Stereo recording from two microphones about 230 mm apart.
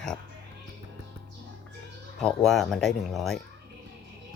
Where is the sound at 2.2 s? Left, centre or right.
Centre.